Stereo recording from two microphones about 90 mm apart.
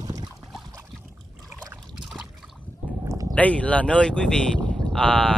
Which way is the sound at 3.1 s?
40° right (ahead or behind).